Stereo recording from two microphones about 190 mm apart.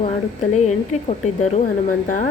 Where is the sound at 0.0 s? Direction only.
35° left (ahead or behind).